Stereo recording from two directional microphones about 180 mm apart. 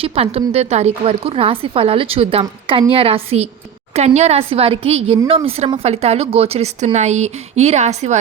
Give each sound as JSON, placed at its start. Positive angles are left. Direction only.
{"t": 0.0, "sound": "speech", "side_deg": -30}